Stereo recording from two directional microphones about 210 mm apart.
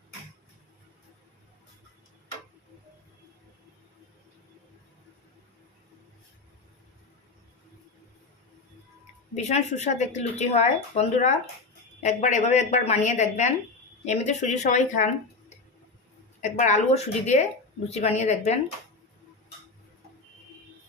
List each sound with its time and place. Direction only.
9.3 s speech: 30° left (ahead or behind)